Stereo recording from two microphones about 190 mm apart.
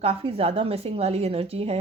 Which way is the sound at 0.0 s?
30° right (ahead or behind).